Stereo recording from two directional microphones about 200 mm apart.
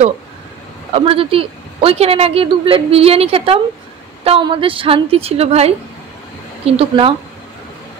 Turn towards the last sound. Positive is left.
turn(degrees=-30)  # may be behind; listen again after turning